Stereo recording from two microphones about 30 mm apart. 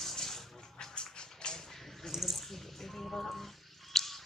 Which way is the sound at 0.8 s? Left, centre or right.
Left.